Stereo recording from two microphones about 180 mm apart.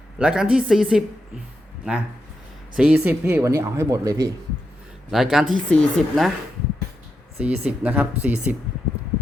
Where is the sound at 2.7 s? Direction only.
5° right (ahead or behind).